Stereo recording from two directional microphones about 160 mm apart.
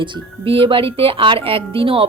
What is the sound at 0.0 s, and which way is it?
Speech, 35° right (ahead or behind).